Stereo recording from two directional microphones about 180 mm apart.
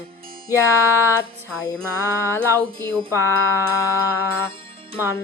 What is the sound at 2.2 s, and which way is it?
Music, 15° left (ahead or behind).